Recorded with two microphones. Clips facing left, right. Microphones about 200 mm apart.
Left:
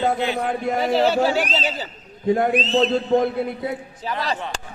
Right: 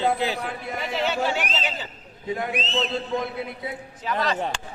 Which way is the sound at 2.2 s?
50° left (ahead or behind).